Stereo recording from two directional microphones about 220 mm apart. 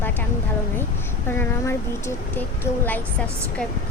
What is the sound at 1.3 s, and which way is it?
A woman's voice, 10° left (ahead or behind).